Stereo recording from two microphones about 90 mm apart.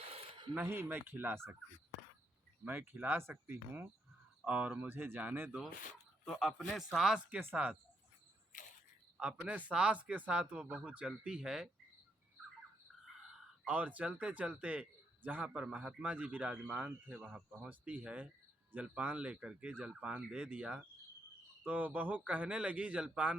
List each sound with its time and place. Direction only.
0.1 s a sound: 65° right (ahead or behind)
0.6 s speech: 25° right (ahead or behind)
2.6 s a man's voice: 20° right (ahead or behind)
6.2 s a man's voice: centre (ahead or behind)
7.3 s a man's voice: 20° right (ahead or behind)
9.1 s a man's voice: 15° right (ahead or behind)
13.7 s a man's voice: 15° right (ahead or behind)